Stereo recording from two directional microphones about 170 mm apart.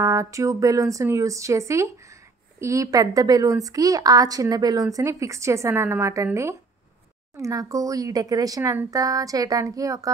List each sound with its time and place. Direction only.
0.0 s a woman's voice: 20° right (ahead or behind)